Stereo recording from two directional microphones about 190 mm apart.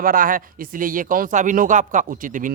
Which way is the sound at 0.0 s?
45° right (ahead or behind).